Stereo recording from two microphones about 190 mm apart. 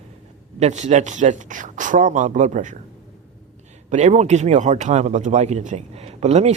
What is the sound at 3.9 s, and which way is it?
Speech, 40° right (ahead or behind).